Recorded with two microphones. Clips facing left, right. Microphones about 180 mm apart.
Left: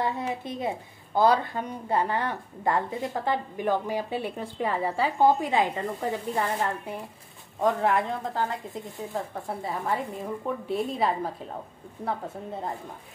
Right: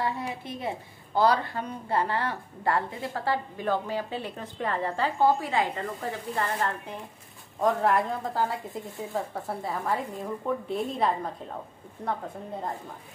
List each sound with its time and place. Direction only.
0.5 s a woman's voice: 20° left (ahead or behind)
7.6 s a woman's voice: centre (ahead or behind)